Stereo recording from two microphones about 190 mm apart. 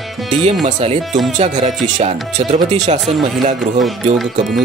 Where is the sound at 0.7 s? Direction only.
35° right (ahead or behind).